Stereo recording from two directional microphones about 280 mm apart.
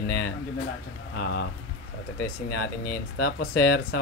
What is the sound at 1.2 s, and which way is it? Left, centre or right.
Speech, left.